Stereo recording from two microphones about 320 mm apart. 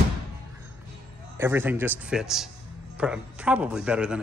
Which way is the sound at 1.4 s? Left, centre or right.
Centre.